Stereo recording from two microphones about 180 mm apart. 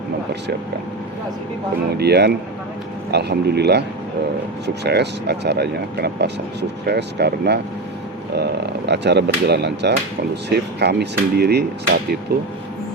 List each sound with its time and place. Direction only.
2.0 s speech: 65° right (ahead or behind)
8.9 s speech: 70° right (ahead or behind)